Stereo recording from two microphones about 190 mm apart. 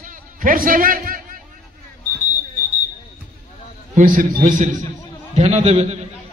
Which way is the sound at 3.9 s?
40° right (ahead or behind).